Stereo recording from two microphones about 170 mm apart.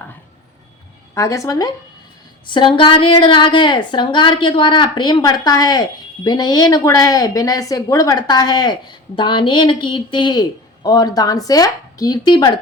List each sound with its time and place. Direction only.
1.1 s a woman's voice: 20° left (ahead or behind)